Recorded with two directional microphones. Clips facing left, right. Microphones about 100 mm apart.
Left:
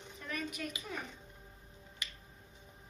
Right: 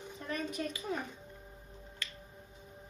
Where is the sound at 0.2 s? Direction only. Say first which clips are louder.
Right 3 dB; 30° right (ahead or behind).